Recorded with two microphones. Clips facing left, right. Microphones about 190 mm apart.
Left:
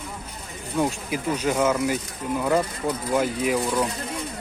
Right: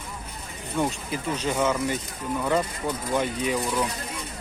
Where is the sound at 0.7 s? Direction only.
5° left (ahead or behind).